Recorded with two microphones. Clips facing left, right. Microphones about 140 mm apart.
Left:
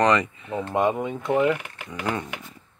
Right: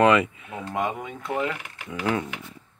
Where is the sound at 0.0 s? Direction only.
5° right (ahead or behind).